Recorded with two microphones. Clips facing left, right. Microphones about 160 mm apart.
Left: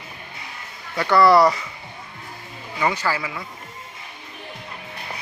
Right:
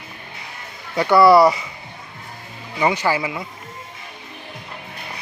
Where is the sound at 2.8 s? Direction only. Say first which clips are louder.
Right 4 dB; 15° right (ahead or behind).